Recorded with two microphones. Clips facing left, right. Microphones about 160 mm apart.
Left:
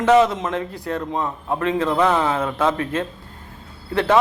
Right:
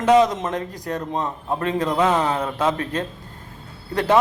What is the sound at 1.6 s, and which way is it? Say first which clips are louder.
Speech: left 3 dB; 40° right (ahead or behind).